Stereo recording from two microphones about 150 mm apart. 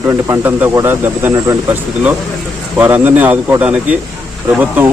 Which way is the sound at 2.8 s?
15° right (ahead or behind).